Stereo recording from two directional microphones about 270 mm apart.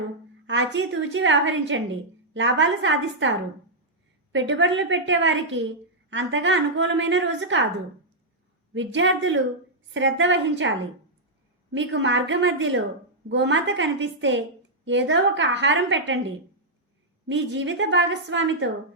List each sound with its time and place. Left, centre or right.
0.4 s a woman's voice: right
8.7 s a woman's voice: right